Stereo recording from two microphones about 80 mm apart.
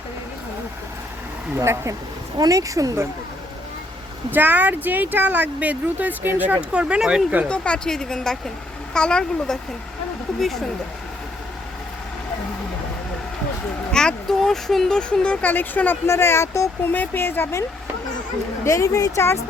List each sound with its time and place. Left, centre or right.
1.5 s speech: right
4.3 s speech: right
7.4 s speech: centre
13.9 s speech: centre; by 16.9 s left
16.9 s a woman's voice: left